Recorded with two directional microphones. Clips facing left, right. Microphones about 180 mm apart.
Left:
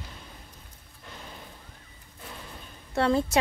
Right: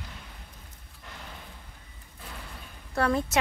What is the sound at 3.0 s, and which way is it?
Speech, 30° left (ahead or behind).